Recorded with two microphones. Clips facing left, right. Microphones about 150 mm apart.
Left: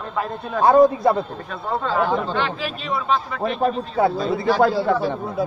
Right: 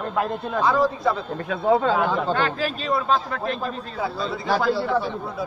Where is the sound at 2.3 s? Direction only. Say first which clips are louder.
Right 1 dB; 45° right (ahead or behind).